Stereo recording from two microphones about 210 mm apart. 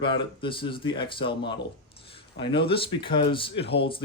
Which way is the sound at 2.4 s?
25° left (ahead or behind).